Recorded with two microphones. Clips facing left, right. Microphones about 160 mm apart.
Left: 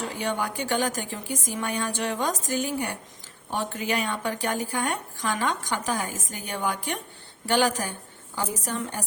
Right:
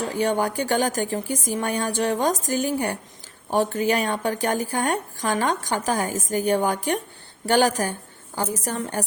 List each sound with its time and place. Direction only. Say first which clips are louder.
0.2 s a woman's voice: right 7 dB; 40° right (ahead or behind)